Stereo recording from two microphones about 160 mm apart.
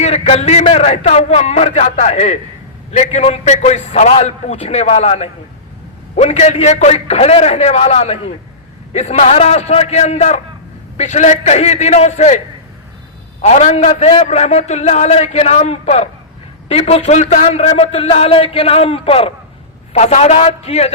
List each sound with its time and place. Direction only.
0.0 s a man's voice: 40° left (ahead or behind)
13.4 s a man's voice: 45° left (ahead or behind)